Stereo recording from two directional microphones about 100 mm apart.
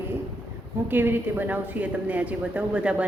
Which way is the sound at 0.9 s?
20° right (ahead or behind).